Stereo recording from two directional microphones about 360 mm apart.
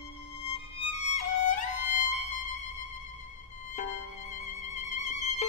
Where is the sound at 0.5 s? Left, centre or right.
Centre.